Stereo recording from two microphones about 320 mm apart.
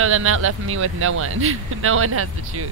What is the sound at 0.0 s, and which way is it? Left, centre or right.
Speech, right.